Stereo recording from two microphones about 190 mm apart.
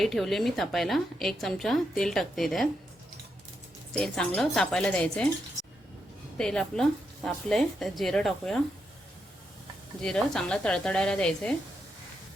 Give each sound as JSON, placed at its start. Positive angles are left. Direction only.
{"t": 0.0, "sound": "a woman's voice", "side_deg": 0}
{"t": 3.9, "sound": "a woman's voice", "side_deg": 5}
{"t": 6.3, "sound": "a woman's voice", "side_deg": 5}
{"t": 10.0, "sound": "a woman's voice", "side_deg": 5}